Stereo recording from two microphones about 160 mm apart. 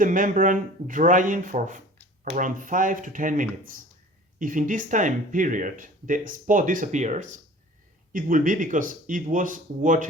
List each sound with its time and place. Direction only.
0.0 s speech: 55° right (ahead or behind)